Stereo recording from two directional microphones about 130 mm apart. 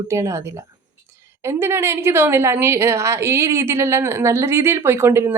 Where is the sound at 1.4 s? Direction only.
20° right (ahead or behind).